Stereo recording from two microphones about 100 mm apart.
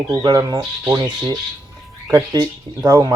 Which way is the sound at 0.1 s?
40° right (ahead or behind).